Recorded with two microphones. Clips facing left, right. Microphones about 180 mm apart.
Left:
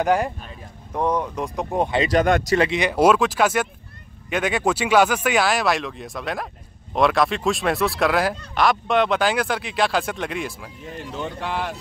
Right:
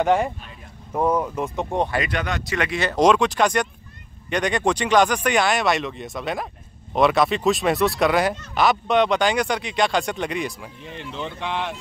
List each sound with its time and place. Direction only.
0.0 s speech: centre (ahead or behind)
2.0 s speech: 45° left (ahead or behind)
2.7 s speech: 10° left (ahead or behind)